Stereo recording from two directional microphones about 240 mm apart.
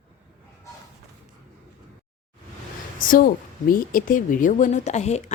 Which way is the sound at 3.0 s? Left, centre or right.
Left.